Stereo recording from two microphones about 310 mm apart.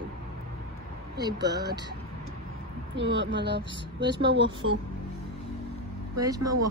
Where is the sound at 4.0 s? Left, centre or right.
Centre.